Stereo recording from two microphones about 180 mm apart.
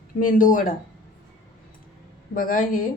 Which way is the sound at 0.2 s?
50° left (ahead or behind).